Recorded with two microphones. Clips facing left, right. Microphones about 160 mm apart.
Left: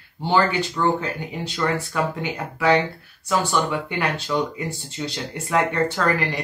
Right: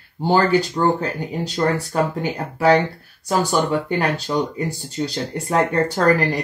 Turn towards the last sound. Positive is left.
turn(degrees=-40)  # may be behind; listen again after turning